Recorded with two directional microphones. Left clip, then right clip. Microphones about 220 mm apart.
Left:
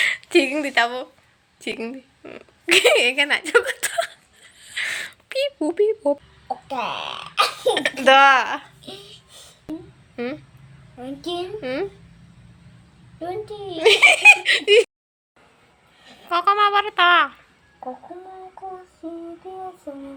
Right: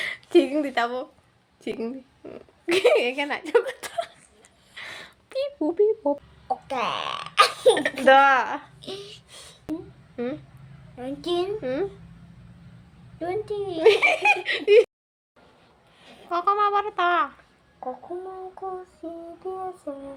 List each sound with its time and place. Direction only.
0.0 s speech: 10° right (ahead or behind)
4.6 s a sound: centre (ahead or behind)
6.5 s speech: 10° right (ahead or behind)
11.0 s a child's voice: 15° right (ahead or behind)
11.6 s speech: centre (ahead or behind)
13.1 s speech: 10° right (ahead or behind)
16.3 s speech: centre (ahead or behind)
19.0 s a child's voice: 15° right (ahead or behind)